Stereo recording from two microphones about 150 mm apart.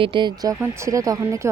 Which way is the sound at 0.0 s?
30° right (ahead or behind).